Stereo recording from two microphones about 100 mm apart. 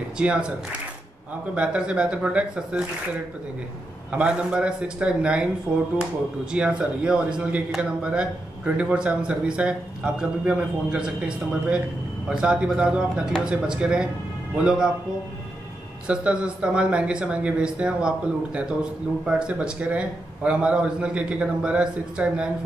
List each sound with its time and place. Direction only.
0.2 s speech: 10° right (ahead or behind)
1.5 s speech: 10° right (ahead or behind)
4.1 s speech: 10° right (ahead or behind)
6.5 s speech: 10° right (ahead or behind)
16.1 s speech: 10° right (ahead or behind)